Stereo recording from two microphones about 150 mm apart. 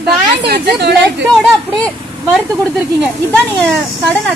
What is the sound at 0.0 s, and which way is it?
Speech, 90° right.